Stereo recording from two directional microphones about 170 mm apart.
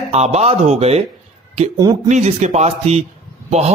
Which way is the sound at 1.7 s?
20° right (ahead or behind).